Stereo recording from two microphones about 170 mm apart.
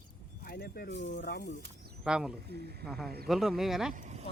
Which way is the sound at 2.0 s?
5° right (ahead or behind).